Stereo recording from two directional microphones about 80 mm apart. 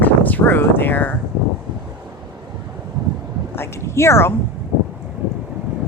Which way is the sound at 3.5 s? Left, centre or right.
Left.